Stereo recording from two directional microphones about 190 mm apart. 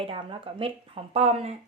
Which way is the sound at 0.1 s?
30° right (ahead or behind).